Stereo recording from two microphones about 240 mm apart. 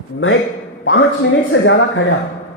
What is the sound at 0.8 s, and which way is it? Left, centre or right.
A man's voice, left.